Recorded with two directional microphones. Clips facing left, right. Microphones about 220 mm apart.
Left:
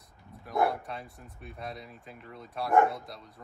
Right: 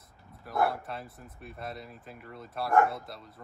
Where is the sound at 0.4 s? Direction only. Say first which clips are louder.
Left 1 dB; centre (ahead or behind).